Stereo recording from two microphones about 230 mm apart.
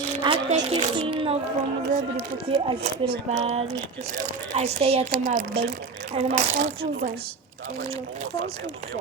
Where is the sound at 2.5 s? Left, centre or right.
Right.